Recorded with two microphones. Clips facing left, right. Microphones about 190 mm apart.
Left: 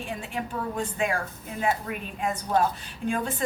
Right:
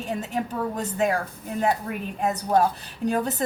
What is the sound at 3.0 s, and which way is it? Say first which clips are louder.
Speech: right 3 dB; 40° right (ahead or behind).